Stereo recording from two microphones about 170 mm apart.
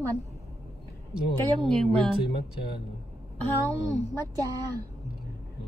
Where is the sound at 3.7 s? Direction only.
40° left (ahead or behind).